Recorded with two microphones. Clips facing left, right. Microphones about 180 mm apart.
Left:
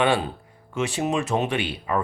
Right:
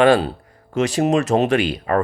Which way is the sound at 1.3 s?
90° right.